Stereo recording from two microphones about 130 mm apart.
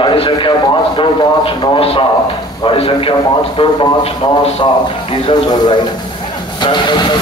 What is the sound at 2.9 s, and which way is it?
A man's voice, 35° left (ahead or behind).